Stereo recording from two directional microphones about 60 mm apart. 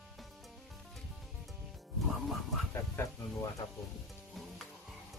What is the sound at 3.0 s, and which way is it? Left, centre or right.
Music, left.